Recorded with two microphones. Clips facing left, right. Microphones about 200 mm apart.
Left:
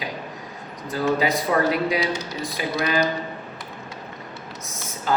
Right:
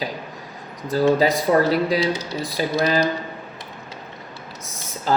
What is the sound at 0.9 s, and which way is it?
Speech, 35° right (ahead or behind).